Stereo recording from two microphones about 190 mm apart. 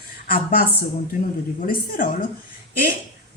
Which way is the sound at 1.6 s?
50° left (ahead or behind).